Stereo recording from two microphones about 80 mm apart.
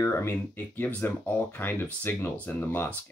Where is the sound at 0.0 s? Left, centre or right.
Left.